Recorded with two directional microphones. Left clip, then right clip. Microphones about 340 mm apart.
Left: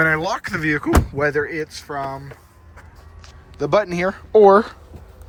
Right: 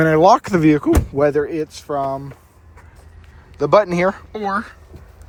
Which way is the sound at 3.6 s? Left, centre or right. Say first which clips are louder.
Right 4 dB; centre.